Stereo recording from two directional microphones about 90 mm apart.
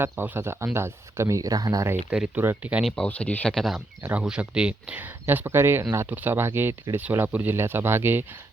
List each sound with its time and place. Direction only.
0.0 s speech: 25° right (ahead or behind); by 1.9 s 40° right (ahead or behind)
2.0 s speech: 15° right (ahead or behind)
3.1 s speech: 15° left (ahead or behind)
4.2 s speech: 10° right (ahead or behind)
5.2 s speech: 25° right (ahead or behind)